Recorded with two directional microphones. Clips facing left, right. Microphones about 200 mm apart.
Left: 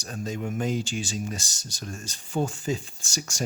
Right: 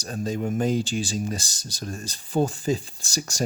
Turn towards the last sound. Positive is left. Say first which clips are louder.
# right 4 dB
turn(degrees=-35)  # may be behind; listen again after turning